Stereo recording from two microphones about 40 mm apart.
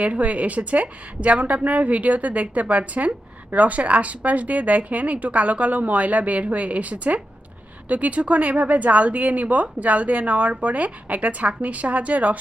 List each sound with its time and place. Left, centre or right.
0.0 s a woman's voice: right